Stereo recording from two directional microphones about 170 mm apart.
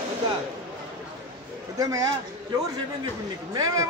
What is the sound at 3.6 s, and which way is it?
Speech, 20° right (ahead or behind).